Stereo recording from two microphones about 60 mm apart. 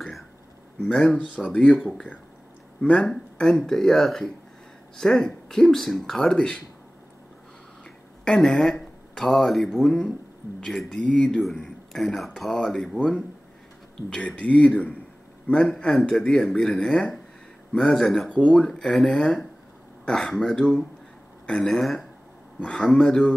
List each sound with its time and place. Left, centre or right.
1.1 s speech: left
2.8 s speech: centre
7.8 s speech: centre
11.0 s speech: centre
11.3 s speech: centre
14.1 s a man's voice: centre
15.8 s speech: centre